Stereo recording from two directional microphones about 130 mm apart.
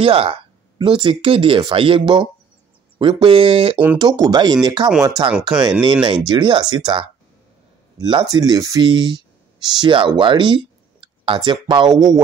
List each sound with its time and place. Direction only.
0.0 s speech: 45° right (ahead or behind)
4.0 s speech: 35° right (ahead or behind)